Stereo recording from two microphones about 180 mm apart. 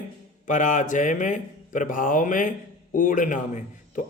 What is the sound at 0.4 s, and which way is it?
A man's voice, 45° left (ahead or behind).